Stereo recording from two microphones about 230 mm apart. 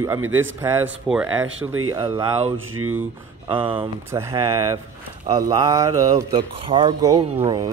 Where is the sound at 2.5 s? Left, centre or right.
Right.